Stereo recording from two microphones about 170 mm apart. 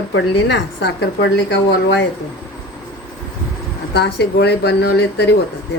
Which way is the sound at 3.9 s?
80° left.